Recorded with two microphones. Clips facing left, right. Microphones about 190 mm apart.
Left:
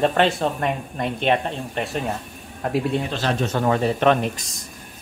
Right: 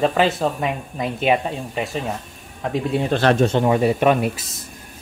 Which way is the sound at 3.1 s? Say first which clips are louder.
Right 7 dB; 65° right (ahead or behind).